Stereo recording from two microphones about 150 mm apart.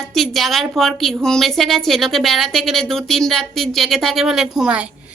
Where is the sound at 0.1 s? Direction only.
Centre (ahead or behind).